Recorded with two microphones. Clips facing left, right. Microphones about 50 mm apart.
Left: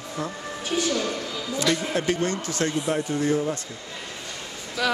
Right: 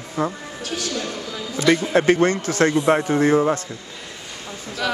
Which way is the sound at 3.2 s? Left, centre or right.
Right.